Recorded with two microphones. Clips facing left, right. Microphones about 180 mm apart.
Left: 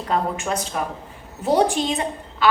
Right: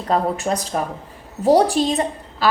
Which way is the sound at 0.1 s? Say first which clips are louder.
Right 4 dB; 35° right (ahead or behind).